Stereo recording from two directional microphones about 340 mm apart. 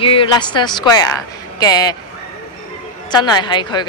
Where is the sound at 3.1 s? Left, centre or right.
Centre.